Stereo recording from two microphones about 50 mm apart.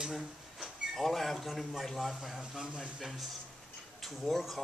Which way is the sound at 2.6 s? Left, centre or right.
Centre.